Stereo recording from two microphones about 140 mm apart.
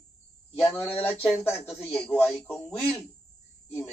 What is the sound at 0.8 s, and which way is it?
Speech, 5° right (ahead or behind).